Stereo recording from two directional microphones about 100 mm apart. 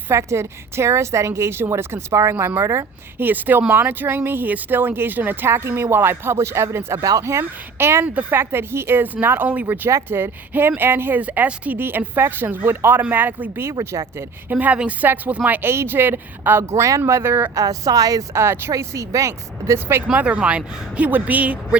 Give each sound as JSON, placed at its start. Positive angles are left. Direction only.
{"t": 0.1, "sound": "speech", "side_deg": -30}
{"t": 2.3, "sound": "speech", "side_deg": -15}
{"t": 2.6, "sound": "speech", "side_deg": -30}
{"t": 14.5, "sound": "speech", "side_deg": -15}
{"t": 17.5, "sound": "speech", "side_deg": -35}
{"t": 20.1, "sound": "speech", "side_deg": -10}